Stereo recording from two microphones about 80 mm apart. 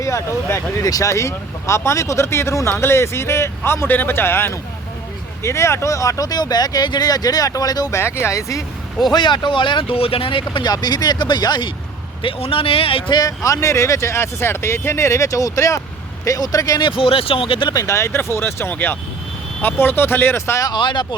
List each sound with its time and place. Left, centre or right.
0.0 s speech: left
7.9 s speech: left
9.1 s speech: left
12.2 s speech: left
13.1 s speech: left
16.8 s speech: left
17.7 s speech: left
20.6 s speech: left